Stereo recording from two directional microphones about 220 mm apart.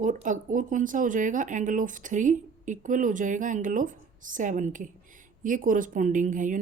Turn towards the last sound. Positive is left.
turn(degrees=-35)  # may be behind; listen again after turning